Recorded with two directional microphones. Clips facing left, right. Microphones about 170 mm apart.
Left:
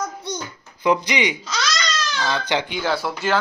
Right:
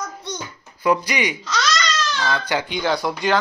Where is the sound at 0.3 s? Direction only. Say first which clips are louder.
Left 2 dB; 10° left (ahead or behind).